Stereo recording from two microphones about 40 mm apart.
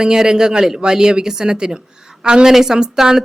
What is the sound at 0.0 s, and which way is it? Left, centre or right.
Speech, centre.